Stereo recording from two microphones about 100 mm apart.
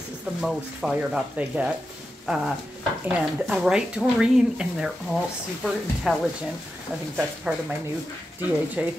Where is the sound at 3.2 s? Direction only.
10° right (ahead or behind).